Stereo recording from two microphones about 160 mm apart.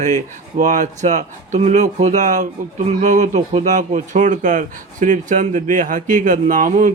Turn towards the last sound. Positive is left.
turn(degrees=-55)  # may be behind; listen again after turning